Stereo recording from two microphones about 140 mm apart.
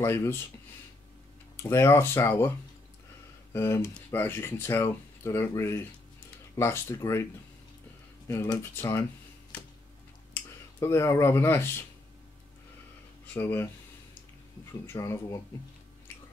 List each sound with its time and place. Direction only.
0.0 s speech: 20° left (ahead or behind)
1.6 s speech: 20° left (ahead or behind)
3.5 s speech: 20° left (ahead or behind)
8.3 s speech: 20° left (ahead or behind)
10.8 s speech: 20° left (ahead or behind)
13.3 s speech: 15° left (ahead or behind)
14.7 s speech: 20° left (ahead or behind)